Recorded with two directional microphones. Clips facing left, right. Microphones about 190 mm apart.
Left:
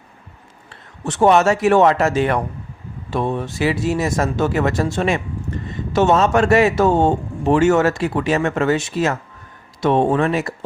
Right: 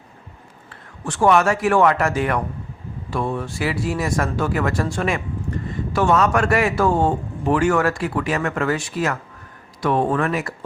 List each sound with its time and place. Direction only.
0.7 s a man's voice: 20° left (ahead or behind)